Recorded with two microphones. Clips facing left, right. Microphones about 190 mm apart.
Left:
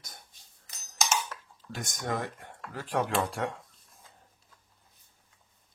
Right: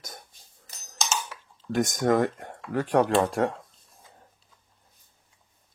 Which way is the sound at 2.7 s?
65° right (ahead or behind).